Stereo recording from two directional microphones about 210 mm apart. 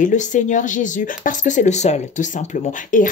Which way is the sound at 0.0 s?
35° left (ahead or behind).